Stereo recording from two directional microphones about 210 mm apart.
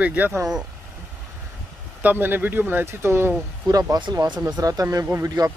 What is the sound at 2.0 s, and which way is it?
Speech, 10° right (ahead or behind).